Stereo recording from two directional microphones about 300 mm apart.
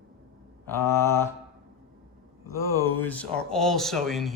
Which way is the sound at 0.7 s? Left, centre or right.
Centre.